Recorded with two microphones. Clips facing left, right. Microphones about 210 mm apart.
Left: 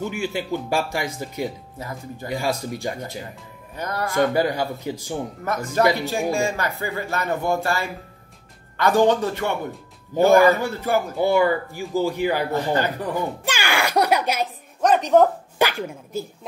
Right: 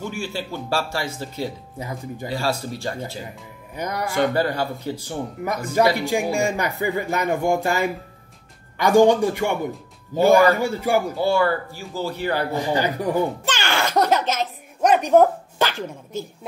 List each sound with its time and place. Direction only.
0.1 s speech: 20° left (ahead or behind)
1.8 s speech: 15° right (ahead or behind)
2.2 s speech: 15° left (ahead or behind)
3.7 s speech: 15° right (ahead or behind)
4.3 s speech: 15° left (ahead or behind)
5.4 s speech: 15° right (ahead or behind)
10.6 s speech: 10° right (ahead or behind)
11.1 s speech: 20° left (ahead or behind)
12.5 s speech: 15° right (ahead or behind)
13.5 s music: 10° left (ahead or behind)
14.8 s speech: 10° right (ahead or behind)
15.6 s speech: 10° left (ahead or behind)